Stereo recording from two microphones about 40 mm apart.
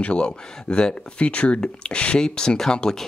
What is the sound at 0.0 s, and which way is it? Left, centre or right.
Speech, left.